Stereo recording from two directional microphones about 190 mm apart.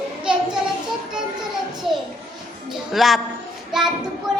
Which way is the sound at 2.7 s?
Centre (ahead or behind).